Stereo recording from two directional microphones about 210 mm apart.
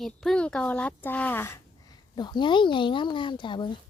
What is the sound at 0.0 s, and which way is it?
Speech, centre (ahead or behind).